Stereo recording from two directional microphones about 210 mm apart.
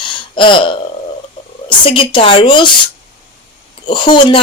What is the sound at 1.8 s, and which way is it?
Speech, 25° left (ahead or behind).